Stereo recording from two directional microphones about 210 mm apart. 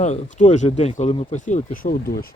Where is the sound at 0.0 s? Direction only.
35° left (ahead or behind).